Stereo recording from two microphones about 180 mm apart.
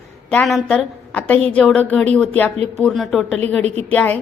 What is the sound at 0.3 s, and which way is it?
A woman's voice, 5° left (ahead or behind).